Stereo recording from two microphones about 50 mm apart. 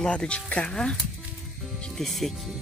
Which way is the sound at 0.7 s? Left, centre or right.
Centre.